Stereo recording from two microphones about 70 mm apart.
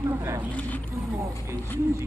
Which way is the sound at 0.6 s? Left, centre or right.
Left.